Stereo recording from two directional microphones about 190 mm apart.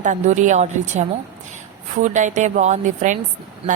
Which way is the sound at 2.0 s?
40° right (ahead or behind).